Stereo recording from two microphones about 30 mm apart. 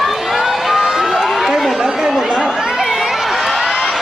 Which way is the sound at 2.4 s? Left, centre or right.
Centre.